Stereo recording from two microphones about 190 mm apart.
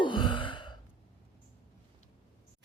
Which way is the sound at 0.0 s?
25° left (ahead or behind).